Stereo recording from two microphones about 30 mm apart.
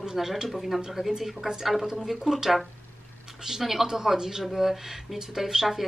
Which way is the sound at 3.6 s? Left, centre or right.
Centre.